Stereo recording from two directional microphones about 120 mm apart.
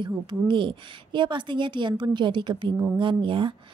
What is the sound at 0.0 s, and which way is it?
A woman's voice, 40° right (ahead or behind).